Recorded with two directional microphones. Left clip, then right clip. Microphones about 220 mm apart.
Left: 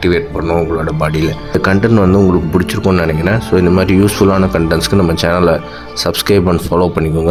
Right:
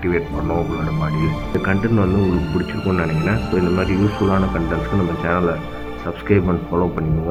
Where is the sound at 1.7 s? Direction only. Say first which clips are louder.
Left 9 dB; 50° left (ahead or behind).